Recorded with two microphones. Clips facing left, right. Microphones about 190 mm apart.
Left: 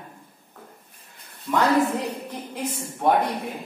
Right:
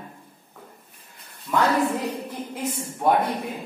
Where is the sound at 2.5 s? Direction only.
Centre (ahead or behind).